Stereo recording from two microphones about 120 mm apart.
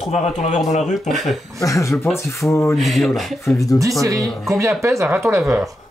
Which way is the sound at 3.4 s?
25° left (ahead or behind).